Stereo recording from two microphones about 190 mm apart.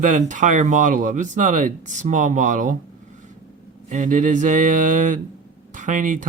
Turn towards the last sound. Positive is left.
turn(degrees=-40)  # may be behind; listen again after turning